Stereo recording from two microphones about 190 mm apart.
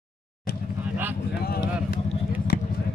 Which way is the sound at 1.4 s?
55° left (ahead or behind).